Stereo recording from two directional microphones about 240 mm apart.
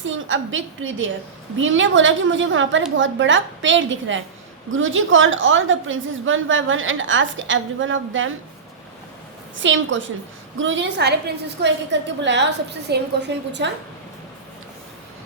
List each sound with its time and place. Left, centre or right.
0.0 s a woman's voice: right
9.6 s a woman's voice: right